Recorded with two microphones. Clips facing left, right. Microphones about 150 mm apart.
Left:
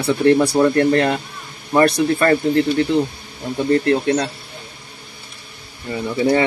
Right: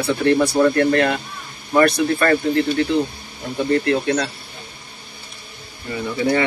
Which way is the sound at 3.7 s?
35° left (ahead or behind).